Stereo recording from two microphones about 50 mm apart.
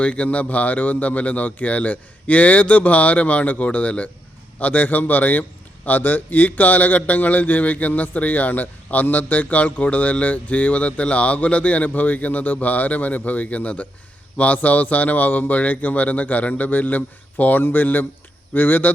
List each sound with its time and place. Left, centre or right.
0.0 s a man's voice: left